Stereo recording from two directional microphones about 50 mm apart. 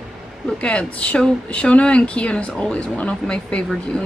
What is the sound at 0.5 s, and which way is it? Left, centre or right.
Speech, left.